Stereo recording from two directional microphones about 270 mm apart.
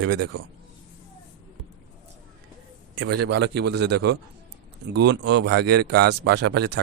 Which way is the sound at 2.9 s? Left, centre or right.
Right.